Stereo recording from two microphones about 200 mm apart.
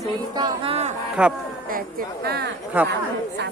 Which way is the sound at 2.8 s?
10° right (ahead or behind).